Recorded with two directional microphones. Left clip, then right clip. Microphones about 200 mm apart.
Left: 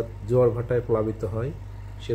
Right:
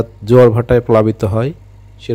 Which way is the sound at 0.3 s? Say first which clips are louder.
Right 13 dB; 50° right (ahead or behind).